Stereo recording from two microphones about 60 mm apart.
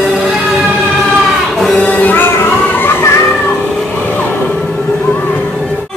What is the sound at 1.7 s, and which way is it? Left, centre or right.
Music, left.